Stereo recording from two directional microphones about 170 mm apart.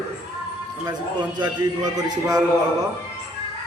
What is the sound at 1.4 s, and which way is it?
A man's voice, 25° right (ahead or behind).